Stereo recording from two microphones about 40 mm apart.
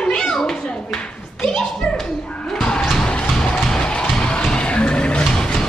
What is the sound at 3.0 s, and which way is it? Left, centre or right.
Music, centre.